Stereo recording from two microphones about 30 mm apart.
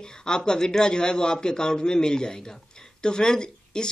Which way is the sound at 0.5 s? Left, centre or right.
Left.